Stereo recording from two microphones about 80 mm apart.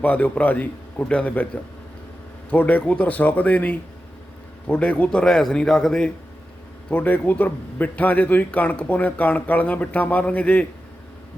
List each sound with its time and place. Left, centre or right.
0.0 s a man's voice: centre
2.5 s a man's voice: centre
6.9 s a man's voice: left